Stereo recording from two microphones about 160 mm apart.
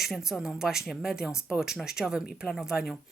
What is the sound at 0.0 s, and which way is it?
Speech, centre (ahead or behind).